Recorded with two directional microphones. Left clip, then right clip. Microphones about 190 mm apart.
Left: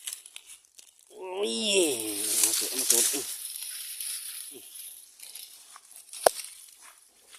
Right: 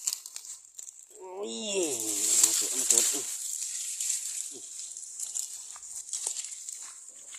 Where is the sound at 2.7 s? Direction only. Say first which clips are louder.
Even; 50° left (ahead or behind).